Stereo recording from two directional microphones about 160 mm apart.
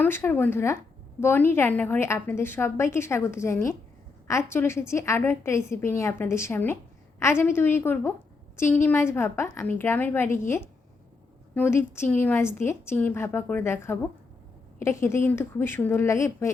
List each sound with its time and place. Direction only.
0.0 s a woman's voice: 15° left (ahead or behind)